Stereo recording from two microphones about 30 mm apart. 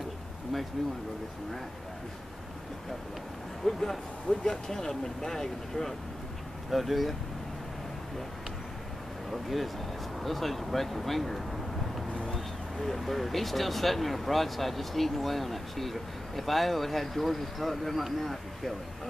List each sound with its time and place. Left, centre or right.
3.6 s speech: centre
4.3 s speech: left
6.7 s speech: centre
9.3 s speech: centre
12.8 s speech: centre